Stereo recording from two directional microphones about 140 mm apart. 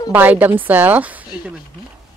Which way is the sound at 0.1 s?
10° right (ahead or behind).